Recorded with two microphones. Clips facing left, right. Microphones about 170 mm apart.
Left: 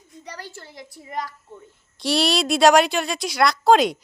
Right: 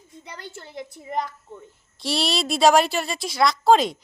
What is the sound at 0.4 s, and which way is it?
Speech, 20° right (ahead or behind).